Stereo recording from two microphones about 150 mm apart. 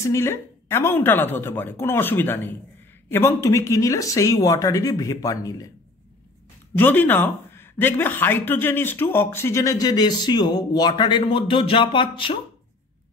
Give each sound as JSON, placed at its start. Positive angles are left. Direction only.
{"t": 0.0, "sound": "a woman's voice", "side_deg": 20}
{"t": 6.8, "sound": "speech", "side_deg": 10}